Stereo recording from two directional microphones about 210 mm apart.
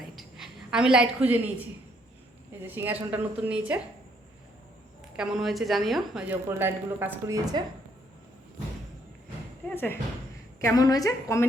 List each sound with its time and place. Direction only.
0.0 s a sound: centre (ahead or behind)
2.5 s a woman's voice: 10° right (ahead or behind)
5.1 s a woman's voice: centre (ahead or behind)
7.6 s speech: 20° right (ahead or behind)
9.6 s a woman's voice: 10° left (ahead or behind)